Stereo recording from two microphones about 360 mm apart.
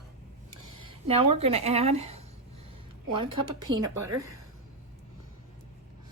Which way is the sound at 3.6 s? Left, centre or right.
Right.